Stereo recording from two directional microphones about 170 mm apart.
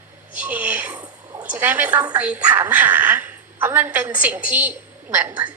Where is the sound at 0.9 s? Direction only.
25° right (ahead or behind).